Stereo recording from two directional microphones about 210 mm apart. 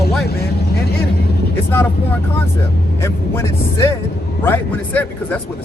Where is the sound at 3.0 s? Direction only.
15° left (ahead or behind).